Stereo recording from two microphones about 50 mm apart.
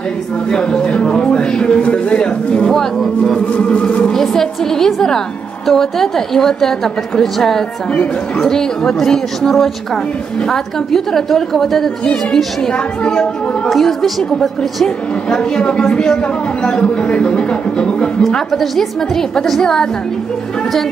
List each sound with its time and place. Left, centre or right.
0.5 s speech: centre
3.3 s a woman's voice: left
4.1 s a woman's voice: centre
13.7 s a woman's voice: centre
15.2 s a woman's voice: centre
18.2 s speech: centre